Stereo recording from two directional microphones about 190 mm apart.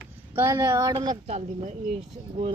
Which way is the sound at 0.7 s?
20° right (ahead or behind).